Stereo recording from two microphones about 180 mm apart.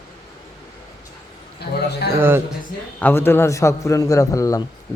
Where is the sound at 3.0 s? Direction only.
10° left (ahead or behind).